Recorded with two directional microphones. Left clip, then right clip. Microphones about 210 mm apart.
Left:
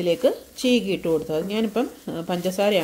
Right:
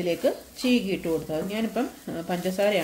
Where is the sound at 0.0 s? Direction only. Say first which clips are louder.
Left 4 dB; 40° left (ahead or behind).